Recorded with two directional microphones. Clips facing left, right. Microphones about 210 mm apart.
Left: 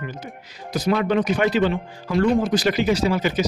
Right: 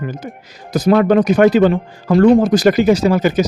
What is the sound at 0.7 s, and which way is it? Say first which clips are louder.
Speech: right 8 dB; 45° right (ahead or behind).